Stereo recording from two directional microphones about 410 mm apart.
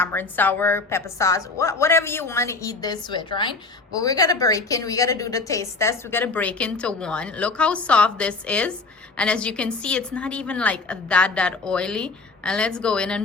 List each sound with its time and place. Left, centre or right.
0.0 s a woman's voice: centre